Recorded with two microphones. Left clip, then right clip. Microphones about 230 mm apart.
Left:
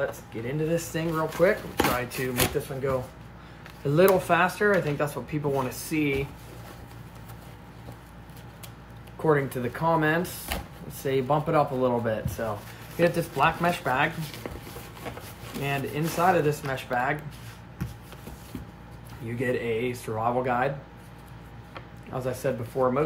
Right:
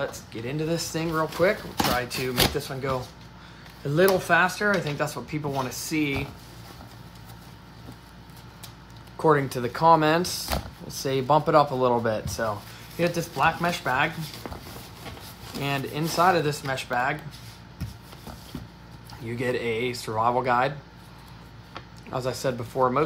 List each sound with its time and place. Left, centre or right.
0.3 s speech: centre
9.2 s speech: right
12.9 s speech: centre
15.6 s speech: centre
19.2 s speech: centre
21.7 s speech: centre